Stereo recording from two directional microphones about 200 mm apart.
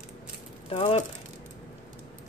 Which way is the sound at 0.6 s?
30° left (ahead or behind).